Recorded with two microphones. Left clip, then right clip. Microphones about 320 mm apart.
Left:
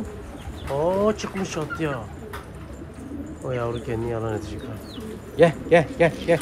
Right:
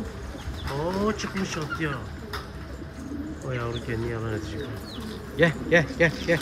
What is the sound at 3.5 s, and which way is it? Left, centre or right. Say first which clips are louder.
Speech: left 5 dB; centre.